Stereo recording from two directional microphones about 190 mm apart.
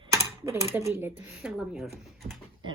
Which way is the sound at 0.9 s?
10° right (ahead or behind).